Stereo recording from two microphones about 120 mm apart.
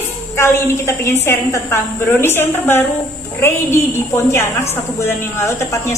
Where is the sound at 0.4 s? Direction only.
20° left (ahead or behind).